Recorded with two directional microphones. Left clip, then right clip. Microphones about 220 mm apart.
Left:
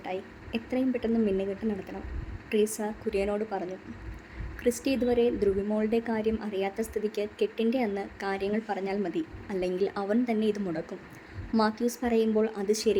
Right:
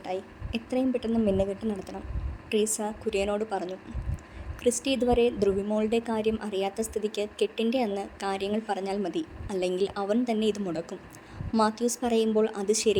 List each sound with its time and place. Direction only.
0.0 s a woman's voice: 20° right (ahead or behind)